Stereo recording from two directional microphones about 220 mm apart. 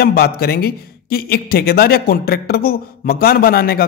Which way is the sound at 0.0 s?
45° left (ahead or behind).